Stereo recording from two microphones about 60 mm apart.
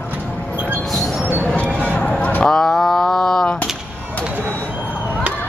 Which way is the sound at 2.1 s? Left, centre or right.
Left.